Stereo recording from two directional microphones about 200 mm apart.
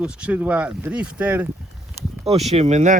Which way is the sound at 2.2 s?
30° right (ahead or behind).